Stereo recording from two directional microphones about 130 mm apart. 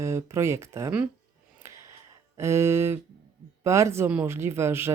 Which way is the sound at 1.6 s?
20° right (ahead or behind).